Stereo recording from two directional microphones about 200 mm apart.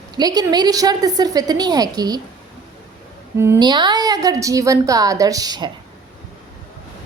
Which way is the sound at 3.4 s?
15° right (ahead or behind).